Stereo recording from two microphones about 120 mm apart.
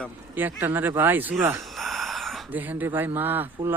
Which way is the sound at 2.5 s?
15° right (ahead or behind).